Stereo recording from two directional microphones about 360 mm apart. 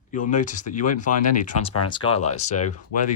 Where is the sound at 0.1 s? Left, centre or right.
Left.